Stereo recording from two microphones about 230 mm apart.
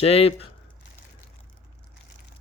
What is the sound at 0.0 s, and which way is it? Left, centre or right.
Speech, left.